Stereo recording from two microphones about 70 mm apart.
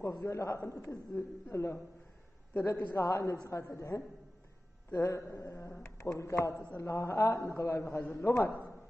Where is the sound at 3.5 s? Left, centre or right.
Left.